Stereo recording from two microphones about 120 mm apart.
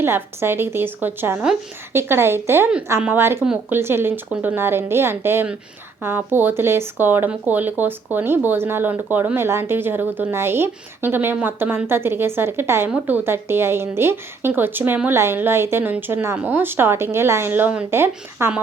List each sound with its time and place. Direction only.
0.0 s a woman's voice: 20° right (ahead or behind)